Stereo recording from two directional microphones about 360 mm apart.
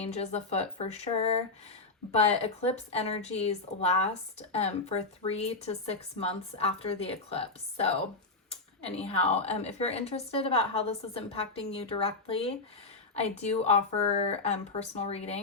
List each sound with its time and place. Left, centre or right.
0.0 s a woman's voice: centre